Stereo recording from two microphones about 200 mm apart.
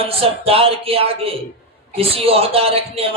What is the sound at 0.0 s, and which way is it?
A man's voice, 30° right (ahead or behind).